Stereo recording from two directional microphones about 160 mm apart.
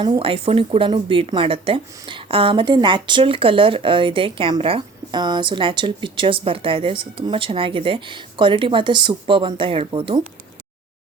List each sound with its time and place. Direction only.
0.0 s speech: 35° right (ahead or behind)